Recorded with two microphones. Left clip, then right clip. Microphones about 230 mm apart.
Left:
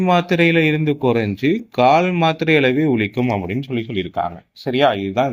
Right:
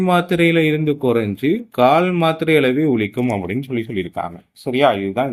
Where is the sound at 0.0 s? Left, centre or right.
Left.